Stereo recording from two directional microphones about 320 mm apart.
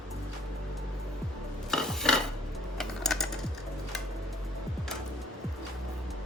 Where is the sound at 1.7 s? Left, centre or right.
Centre.